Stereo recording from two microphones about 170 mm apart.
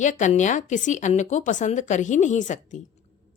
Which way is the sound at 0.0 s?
45° left (ahead or behind).